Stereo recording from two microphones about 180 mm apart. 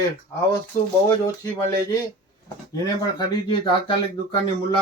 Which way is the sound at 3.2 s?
25° left (ahead or behind).